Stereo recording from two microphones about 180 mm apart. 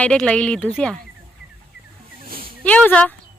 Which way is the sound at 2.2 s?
55° right (ahead or behind).